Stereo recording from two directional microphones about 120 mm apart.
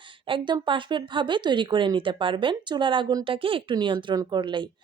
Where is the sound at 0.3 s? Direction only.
40° right (ahead or behind).